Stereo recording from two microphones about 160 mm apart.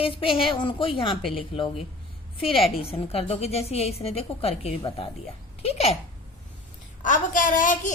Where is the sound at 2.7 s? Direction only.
35° left (ahead or behind).